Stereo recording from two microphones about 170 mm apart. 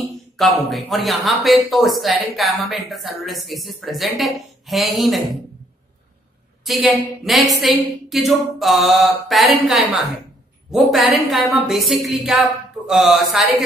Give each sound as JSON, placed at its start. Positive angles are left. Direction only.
{"t": 0.0, "sound": "speech", "side_deg": 0}
{"t": 6.6, "sound": "speech", "side_deg": -5}